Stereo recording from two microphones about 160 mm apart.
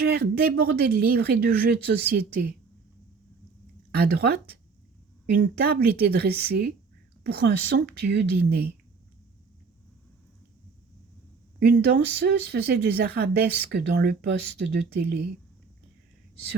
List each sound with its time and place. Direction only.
0.0 s speech: 80° right
3.9 s speech: 75° right (ahead or behind)
11.8 s speech: 90° right